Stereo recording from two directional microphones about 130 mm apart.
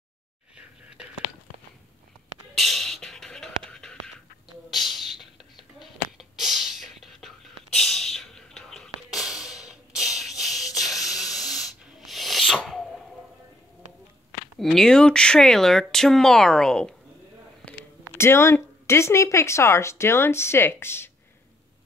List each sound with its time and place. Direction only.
0.6 s whispering: 5° right (ahead or behind)
2.5 s music: centre (ahead or behind)
4.6 s a sound: centre (ahead or behind)
14.6 s speech: 5° left (ahead or behind)
18.1 s speech: 20° left (ahead or behind)